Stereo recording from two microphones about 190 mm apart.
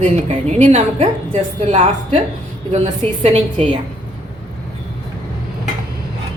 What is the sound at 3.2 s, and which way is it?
Speech, 30° right (ahead or behind).